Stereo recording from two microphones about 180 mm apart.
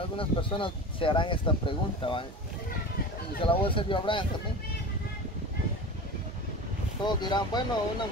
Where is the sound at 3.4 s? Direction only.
30° left (ahead or behind).